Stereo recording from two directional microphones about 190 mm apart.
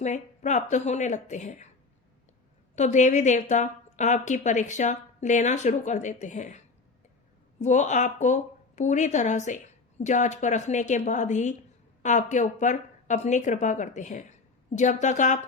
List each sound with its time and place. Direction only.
0.0 s a woman's voice: 40° left (ahead or behind)
2.7 s a woman's voice: 40° left (ahead or behind)
7.6 s a woman's voice: 40° left (ahead or behind)